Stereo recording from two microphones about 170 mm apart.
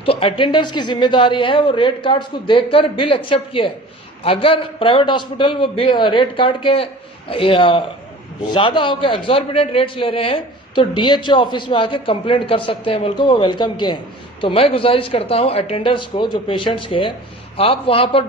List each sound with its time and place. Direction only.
0.0 s a man's voice: 30° left (ahead or behind)